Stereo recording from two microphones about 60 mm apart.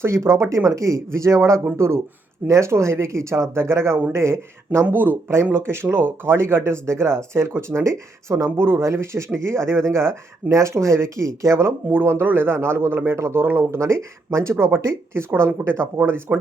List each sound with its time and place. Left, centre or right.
0.0 s speech: right
8.4 s speech: right
12.2 s speech: right
13.7 s speech: right